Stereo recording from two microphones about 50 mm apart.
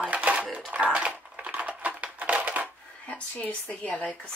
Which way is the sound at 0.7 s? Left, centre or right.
Right.